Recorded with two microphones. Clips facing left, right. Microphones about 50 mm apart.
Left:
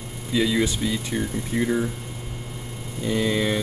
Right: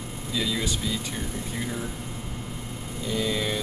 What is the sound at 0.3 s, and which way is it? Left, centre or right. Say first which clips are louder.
Speech: left 7 dB; left.